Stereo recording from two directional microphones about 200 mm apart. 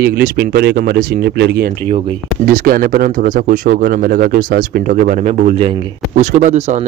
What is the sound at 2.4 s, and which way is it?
Speech, 45° right (ahead or behind).